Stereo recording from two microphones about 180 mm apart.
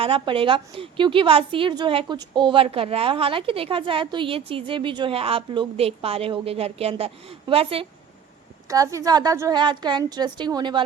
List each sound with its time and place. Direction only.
0.0 s a woman's voice: 30° right (ahead or behind)
8.6 s a woman's voice: 20° right (ahead or behind)